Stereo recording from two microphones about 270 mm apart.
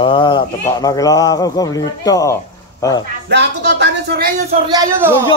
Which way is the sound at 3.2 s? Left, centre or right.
Right.